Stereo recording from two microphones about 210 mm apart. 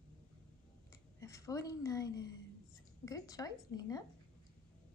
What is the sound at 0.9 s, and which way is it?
Speech, 15° left (ahead or behind).